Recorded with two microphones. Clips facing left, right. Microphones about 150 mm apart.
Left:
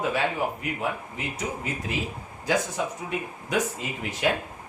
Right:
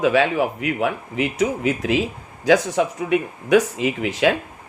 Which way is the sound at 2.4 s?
80° right.